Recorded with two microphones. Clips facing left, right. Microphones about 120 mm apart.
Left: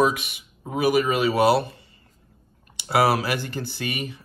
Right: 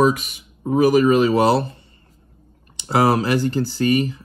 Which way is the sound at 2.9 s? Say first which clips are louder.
Right 3 dB; 40° right (ahead or behind).